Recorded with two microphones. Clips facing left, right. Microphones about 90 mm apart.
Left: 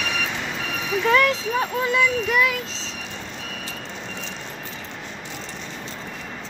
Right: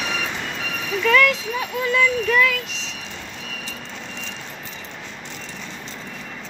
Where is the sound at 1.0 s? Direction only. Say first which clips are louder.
Right 1 dB; 30° left (ahead or behind).